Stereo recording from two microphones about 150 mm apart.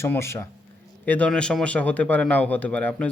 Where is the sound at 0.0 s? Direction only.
15° left (ahead or behind).